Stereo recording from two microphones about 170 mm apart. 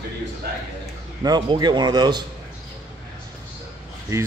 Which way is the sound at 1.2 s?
25° right (ahead or behind).